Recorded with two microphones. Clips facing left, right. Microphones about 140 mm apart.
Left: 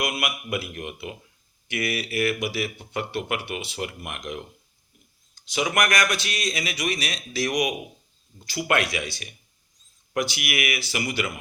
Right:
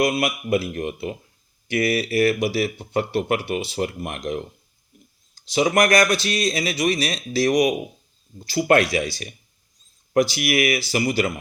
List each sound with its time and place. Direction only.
0.0 s speech: 35° right (ahead or behind)